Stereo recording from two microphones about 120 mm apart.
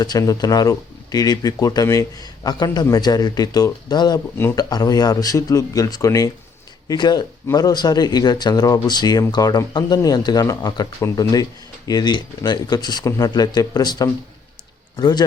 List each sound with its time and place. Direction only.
0.0 s a man's voice: 30° left (ahead or behind)